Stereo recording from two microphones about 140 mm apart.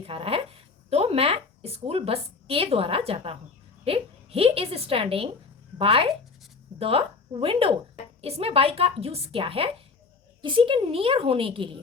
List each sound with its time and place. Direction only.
0.0 s a woman's voice: 45° right (ahead or behind)